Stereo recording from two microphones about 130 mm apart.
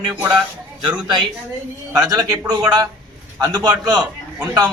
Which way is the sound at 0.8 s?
35° right (ahead or behind).